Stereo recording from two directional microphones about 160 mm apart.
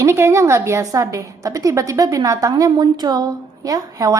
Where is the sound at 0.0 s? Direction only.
15° right (ahead or behind).